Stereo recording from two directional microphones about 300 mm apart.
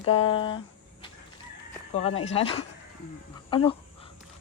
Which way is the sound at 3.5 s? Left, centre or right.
Centre.